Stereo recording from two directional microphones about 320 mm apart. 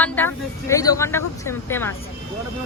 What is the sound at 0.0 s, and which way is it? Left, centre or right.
Speech, centre.